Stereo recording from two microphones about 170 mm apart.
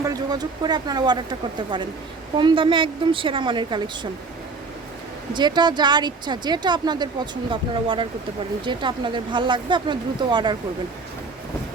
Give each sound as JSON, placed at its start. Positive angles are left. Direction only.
{"t": 0.0, "sound": "speech", "side_deg": -20}
{"t": 5.3, "sound": "speech", "side_deg": -25}